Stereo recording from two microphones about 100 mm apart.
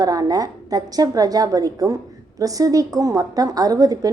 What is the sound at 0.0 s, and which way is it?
A woman's voice, 40° right (ahead or behind).